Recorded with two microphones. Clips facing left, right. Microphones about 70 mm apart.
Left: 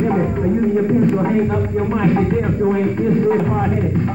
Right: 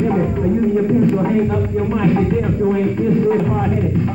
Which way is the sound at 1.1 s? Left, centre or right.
Left.